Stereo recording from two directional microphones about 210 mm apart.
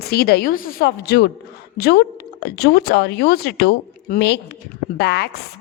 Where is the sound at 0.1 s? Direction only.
45° left (ahead or behind).